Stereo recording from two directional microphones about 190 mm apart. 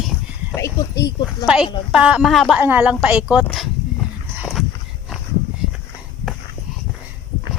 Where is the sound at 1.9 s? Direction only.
5° right (ahead or behind).